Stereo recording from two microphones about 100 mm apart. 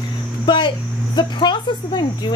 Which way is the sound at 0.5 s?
50° left (ahead or behind).